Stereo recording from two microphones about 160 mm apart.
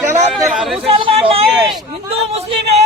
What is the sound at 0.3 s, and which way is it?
Chatter, centre (ahead or behind).